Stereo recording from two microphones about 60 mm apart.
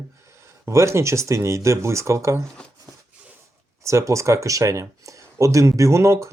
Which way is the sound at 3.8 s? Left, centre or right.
Right.